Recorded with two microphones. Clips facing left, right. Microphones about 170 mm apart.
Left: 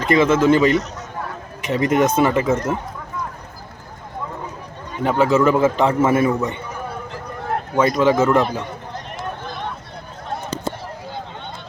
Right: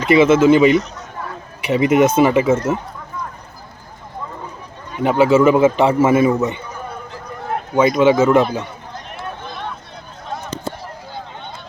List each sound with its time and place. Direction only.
0.0 s a man's voice: 5° right (ahead or behind)
5.0 s a man's voice: 5° right (ahead or behind)
7.8 s speech: 5° right (ahead or behind)